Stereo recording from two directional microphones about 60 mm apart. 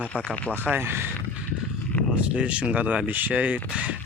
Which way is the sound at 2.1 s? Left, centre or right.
Centre.